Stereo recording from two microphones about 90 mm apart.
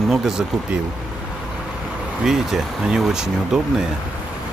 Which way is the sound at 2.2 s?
5° right (ahead or behind).